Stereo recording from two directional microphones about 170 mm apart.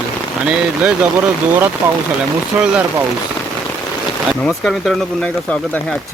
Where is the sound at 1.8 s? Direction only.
15° right (ahead or behind).